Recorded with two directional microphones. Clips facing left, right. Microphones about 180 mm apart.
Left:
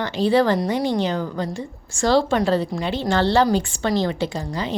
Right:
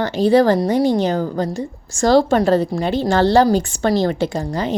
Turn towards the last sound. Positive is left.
turn(degrees=-45)  # may be behind; listen again after turning